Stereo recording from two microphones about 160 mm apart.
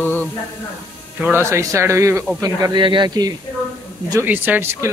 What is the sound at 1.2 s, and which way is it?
Speech, 15° right (ahead or behind).